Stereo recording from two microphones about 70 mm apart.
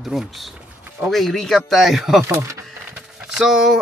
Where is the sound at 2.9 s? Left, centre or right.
Centre.